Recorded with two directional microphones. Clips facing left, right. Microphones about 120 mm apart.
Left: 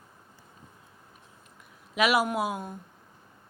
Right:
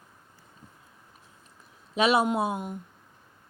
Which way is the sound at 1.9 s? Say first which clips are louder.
Right 2 dB; 25° right (ahead or behind).